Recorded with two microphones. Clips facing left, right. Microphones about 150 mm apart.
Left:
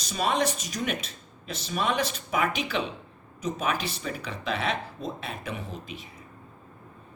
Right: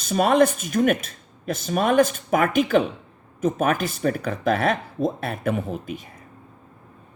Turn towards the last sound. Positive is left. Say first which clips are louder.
# right 9 dB
turn(degrees=-50)  # may be behind; listen again after turning